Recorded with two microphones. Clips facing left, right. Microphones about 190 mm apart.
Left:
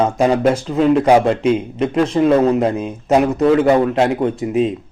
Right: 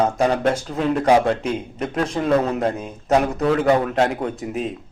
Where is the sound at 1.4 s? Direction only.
90° left.